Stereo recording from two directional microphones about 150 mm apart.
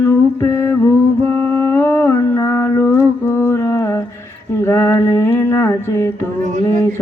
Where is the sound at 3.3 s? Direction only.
15° left (ahead or behind).